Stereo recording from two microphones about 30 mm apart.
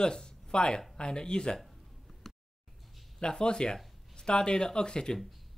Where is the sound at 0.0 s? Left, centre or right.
Left.